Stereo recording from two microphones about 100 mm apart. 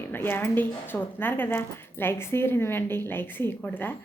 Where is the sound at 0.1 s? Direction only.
20° left (ahead or behind).